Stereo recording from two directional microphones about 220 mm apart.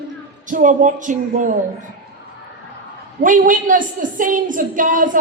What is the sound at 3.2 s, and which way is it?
A woman's voice, 35° right (ahead or behind).